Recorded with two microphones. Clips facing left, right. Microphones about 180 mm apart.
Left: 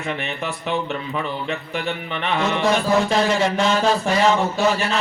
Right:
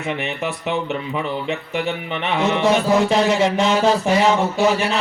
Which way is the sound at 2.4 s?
20° right (ahead or behind).